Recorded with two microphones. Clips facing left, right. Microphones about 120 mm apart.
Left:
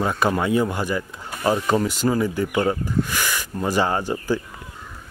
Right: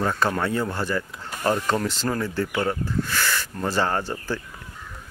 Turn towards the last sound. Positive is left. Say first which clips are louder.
# left 4 dB
turn(degrees=15)  # may be behind; listen again after turning